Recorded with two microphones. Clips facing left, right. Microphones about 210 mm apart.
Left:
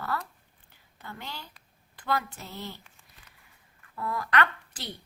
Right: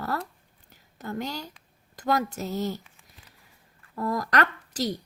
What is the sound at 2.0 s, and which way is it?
Speech, 40° right (ahead or behind).